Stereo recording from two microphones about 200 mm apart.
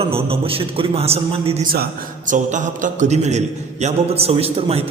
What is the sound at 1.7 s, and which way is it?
A man's voice, 50° right (ahead or behind).